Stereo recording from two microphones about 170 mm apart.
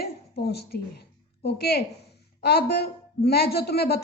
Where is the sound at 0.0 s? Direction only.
70° left (ahead or behind).